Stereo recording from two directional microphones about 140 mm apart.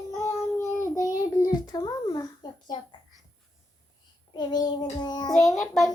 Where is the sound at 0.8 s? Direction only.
25° left (ahead or behind).